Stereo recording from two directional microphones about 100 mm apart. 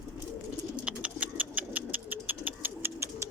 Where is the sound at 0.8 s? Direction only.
15° right (ahead or behind).